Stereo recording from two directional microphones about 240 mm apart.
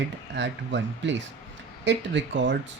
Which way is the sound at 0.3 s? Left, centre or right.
Right.